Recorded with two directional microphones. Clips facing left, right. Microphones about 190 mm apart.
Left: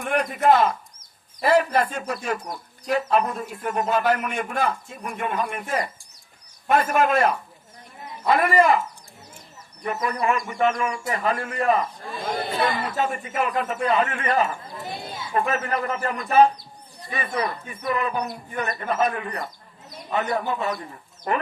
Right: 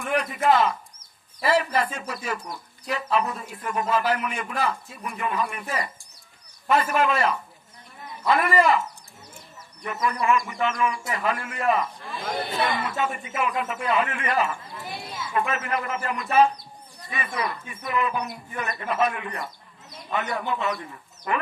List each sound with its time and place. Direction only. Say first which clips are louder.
0.0 s speech: left 2 dB; 45° left (ahead or behind)
1.4 s speech: left 3 dB; 45° left (ahead or behind)
9.8 s speech: left 1 dB; 35° left (ahead or behind)
13.0 s speech: left 2 dB; 40° left (ahead or behind)
14.3 s speech: left 2 dB; 30° left (ahead or behind)